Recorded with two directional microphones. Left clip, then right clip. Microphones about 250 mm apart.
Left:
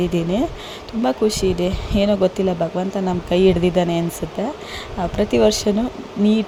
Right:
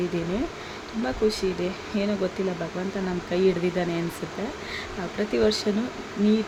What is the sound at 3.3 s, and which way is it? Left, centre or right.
Speech, left.